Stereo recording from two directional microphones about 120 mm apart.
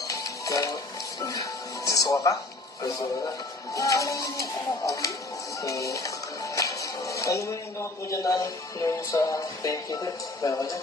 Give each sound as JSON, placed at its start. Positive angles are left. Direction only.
{"t": 0.1, "sound": "music", "side_deg": 30}
{"t": 2.8, "sound": "speech", "side_deg": 30}